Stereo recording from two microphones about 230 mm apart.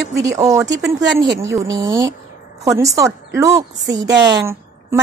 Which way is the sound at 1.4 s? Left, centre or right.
Centre.